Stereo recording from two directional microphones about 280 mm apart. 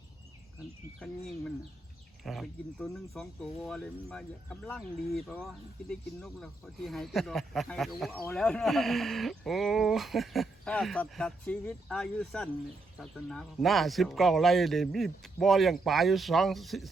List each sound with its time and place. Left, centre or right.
0.9 s speech: centre